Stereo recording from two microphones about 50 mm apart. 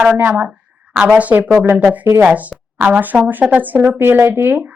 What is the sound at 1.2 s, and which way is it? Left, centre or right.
Speech, right.